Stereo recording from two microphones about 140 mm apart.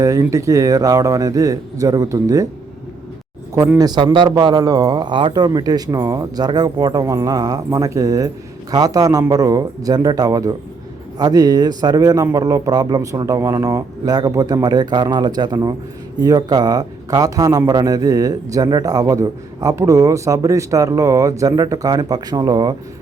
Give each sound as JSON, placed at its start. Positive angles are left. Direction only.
{"t": 0.0, "sound": "a man's voice", "side_deg": -25}
{"t": 3.8, "sound": "a man's voice", "side_deg": -30}